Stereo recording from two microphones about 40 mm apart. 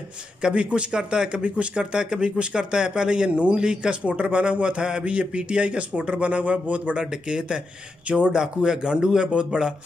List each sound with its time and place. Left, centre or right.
0.4 s a man's voice: right